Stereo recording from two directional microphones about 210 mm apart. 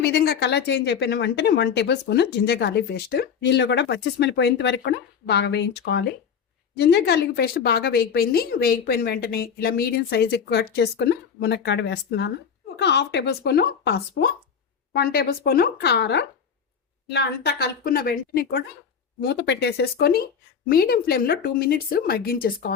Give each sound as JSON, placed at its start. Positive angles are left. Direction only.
{"t": 0.0, "sound": "speech", "side_deg": 50}